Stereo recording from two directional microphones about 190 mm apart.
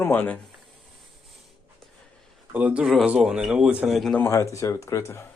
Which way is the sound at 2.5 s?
10° right (ahead or behind).